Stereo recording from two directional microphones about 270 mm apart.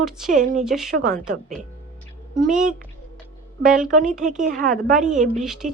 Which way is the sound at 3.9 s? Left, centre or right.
Right.